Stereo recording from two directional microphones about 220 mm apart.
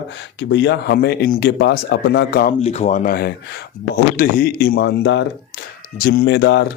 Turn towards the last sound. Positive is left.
turn(degrees=50)  # may be behind; listen again after turning